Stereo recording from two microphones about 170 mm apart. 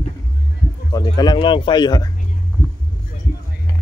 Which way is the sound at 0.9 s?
25° left (ahead or behind).